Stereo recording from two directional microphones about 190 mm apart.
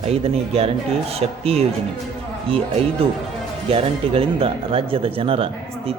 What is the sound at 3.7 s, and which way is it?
Speech, 30° right (ahead or behind).